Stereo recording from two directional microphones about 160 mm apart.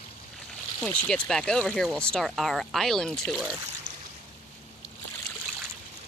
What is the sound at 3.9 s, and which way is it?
Boat, 60° right (ahead or behind).